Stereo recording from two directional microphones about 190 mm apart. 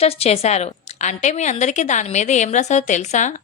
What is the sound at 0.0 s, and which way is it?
A woman's voice, 30° left (ahead or behind).